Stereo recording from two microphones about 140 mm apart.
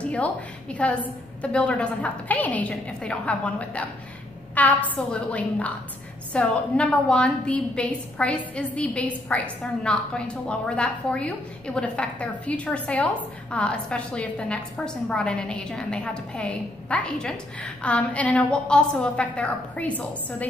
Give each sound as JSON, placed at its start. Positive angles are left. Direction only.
{"t": 0.0, "sound": "a woman's voice", "side_deg": 10}